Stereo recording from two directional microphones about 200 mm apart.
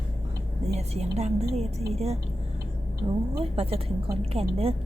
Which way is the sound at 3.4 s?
30° right (ahead or behind).